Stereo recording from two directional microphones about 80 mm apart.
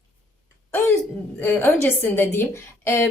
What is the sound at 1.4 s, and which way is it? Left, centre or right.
Speech, left.